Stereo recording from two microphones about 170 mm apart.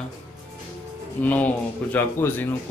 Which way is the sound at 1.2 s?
10° left (ahead or behind).